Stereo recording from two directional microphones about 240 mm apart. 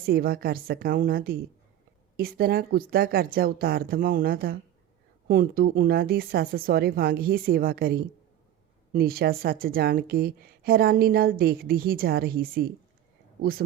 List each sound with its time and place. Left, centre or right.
0.0 s a woman's voice: right